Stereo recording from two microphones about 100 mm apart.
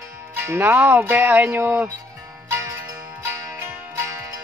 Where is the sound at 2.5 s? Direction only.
30° right (ahead or behind).